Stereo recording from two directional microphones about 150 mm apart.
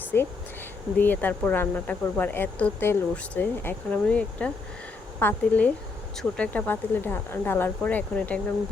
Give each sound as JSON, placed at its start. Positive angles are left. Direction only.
{"t": 0.9, "sound": "speech", "side_deg": 10}